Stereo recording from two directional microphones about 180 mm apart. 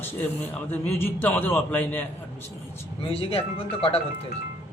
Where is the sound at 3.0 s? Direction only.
30° left (ahead or behind).